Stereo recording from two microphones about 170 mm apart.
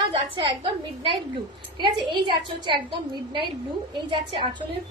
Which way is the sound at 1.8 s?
25° right (ahead or behind).